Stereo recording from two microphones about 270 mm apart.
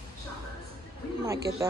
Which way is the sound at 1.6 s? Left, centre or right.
Centre.